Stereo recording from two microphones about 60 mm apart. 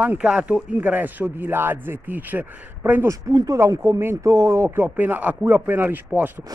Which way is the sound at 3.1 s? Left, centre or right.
Right.